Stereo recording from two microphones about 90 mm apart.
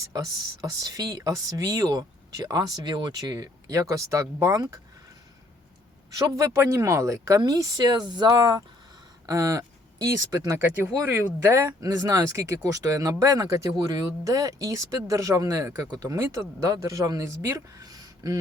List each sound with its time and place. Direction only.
0.6 s speech: 45° right (ahead or behind)
6.1 s speech: 40° right (ahead or behind)
10.8 s speech: 20° right (ahead or behind); by 18.3 s 45° right (ahead or behind)